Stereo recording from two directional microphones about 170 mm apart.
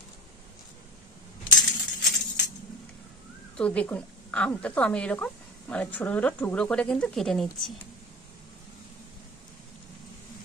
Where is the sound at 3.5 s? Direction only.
5° left (ahead or behind).